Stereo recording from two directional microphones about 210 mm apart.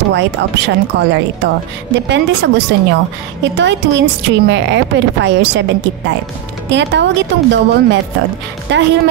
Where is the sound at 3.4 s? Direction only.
60° right (ahead or behind).